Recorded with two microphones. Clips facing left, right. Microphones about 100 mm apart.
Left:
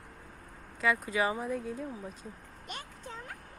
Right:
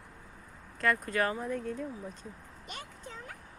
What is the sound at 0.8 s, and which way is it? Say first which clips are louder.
Speech: even; 5° left (ahead or behind).